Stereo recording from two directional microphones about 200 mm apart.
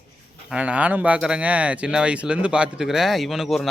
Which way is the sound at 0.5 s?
5° right (ahead or behind).